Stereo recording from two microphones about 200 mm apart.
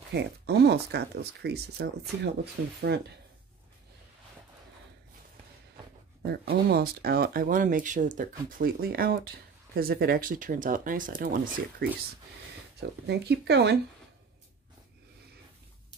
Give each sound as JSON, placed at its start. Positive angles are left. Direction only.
{"t": 0.1, "sound": "speech", "side_deg": -55}
{"t": 2.6, "sound": "speech", "side_deg": -80}
{"t": 6.5, "sound": "speech", "side_deg": -50}
{"t": 13.0, "sound": "speech", "side_deg": -55}